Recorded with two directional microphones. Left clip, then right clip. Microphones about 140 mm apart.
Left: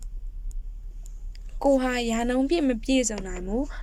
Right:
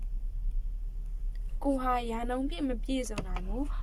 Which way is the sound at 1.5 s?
80° left.